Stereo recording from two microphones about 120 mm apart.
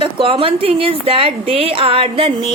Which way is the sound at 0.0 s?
45° right (ahead or behind).